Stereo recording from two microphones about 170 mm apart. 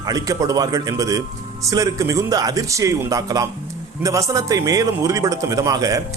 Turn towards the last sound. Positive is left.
turn(degrees=-20)  # may be behind; listen again after turning